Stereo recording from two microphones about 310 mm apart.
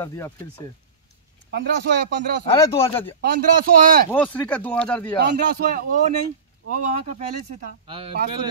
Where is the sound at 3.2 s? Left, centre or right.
Right.